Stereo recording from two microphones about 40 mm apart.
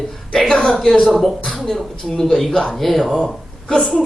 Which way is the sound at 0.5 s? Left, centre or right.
Left.